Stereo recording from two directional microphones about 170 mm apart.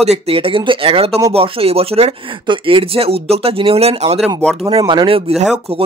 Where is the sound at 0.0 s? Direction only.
35° right (ahead or behind).